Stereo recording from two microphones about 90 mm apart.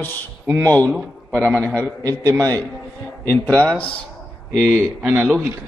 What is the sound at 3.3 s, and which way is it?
Speech, 20° left (ahead or behind).